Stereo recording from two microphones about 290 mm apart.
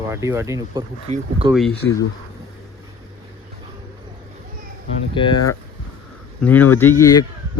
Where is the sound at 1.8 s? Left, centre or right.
Left.